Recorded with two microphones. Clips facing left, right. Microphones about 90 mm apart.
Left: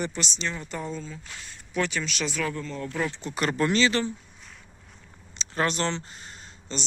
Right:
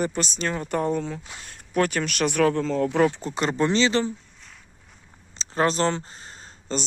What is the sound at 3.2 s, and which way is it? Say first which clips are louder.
Speech: right 2 dB; 25° right (ahead or behind).